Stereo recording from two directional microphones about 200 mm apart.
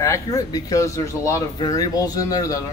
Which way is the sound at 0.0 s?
15° left (ahead or behind).